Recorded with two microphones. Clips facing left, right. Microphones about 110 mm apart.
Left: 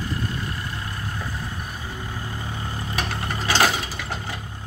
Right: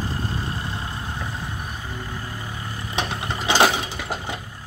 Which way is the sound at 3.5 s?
10° right (ahead or behind).